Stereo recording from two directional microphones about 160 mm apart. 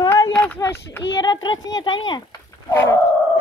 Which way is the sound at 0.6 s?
15° left (ahead or behind).